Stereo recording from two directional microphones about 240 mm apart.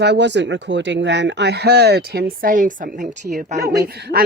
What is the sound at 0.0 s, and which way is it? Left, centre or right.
Speech, right.